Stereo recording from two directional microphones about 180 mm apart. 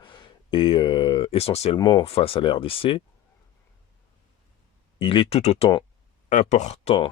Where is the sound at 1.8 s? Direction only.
25° left (ahead or behind).